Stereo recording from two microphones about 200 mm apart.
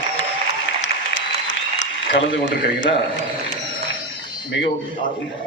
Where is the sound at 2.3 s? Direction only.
65° left (ahead or behind).